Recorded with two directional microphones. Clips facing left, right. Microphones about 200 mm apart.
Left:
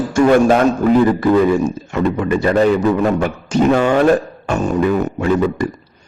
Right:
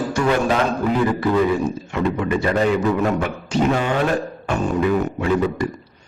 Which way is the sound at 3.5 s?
45° left (ahead or behind).